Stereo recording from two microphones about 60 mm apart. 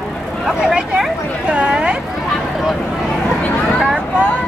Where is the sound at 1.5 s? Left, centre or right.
Centre.